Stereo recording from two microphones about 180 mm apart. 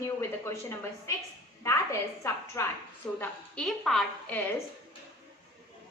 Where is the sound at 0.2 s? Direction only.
15° left (ahead or behind).